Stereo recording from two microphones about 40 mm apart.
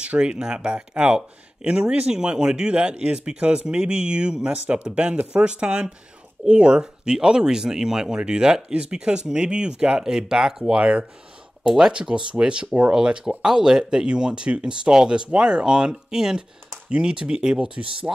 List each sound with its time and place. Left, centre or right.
0.0 s speech: right
11.6 s speech: centre
11.9 s speech: right
18.1 s speech: right